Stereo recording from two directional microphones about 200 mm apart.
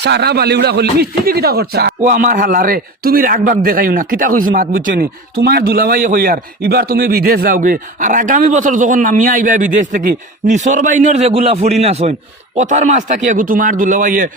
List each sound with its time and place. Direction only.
0.0 s speech: 55° right (ahead or behind)